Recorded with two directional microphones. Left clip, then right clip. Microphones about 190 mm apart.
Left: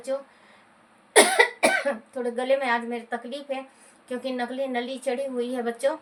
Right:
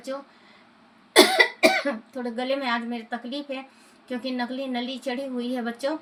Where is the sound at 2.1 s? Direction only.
15° left (ahead or behind).